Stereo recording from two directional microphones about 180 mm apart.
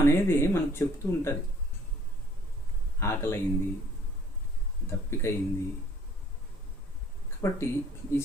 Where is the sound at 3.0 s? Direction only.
15° left (ahead or behind).